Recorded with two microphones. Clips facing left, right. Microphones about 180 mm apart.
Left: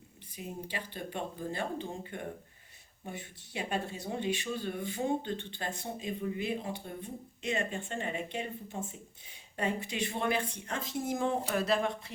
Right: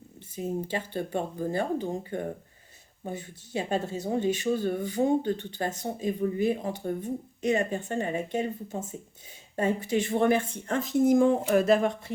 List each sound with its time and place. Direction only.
0.3 s speech: 45° right (ahead or behind)
4.0 s speech: 45° right (ahead or behind)